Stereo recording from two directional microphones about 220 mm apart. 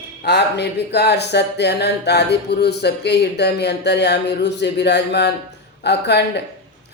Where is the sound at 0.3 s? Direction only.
50° left (ahead or behind).